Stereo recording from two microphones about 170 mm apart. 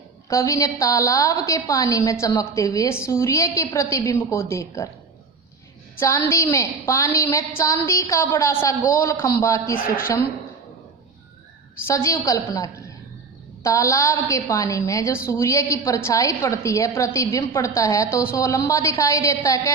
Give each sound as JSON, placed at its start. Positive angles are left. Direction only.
{"t": 0.3, "sound": "a woman's voice", "side_deg": 20}
{"t": 6.0, "sound": "a woman's voice", "side_deg": 15}
{"t": 11.9, "sound": "a woman's voice", "side_deg": 15}